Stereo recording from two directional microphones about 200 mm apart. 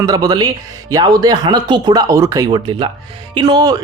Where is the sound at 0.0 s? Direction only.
20° right (ahead or behind).